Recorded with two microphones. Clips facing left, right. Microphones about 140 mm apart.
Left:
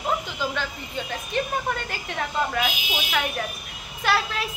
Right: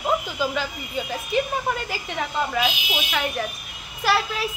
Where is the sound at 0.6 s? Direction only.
5° right (ahead or behind).